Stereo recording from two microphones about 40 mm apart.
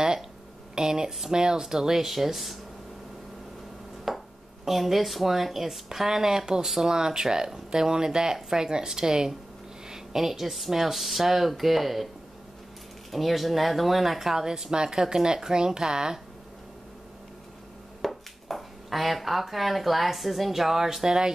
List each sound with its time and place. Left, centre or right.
0.7 s speech: centre
4.1 s a sound: centre
4.6 s speech: centre
13.1 s speech: centre
18.0 s speech: centre